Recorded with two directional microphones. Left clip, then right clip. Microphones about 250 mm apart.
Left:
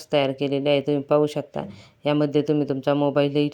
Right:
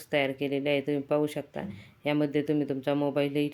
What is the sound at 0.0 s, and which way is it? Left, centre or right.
Speech, centre.